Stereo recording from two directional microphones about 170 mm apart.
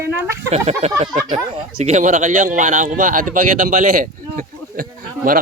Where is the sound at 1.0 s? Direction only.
20° right (ahead or behind).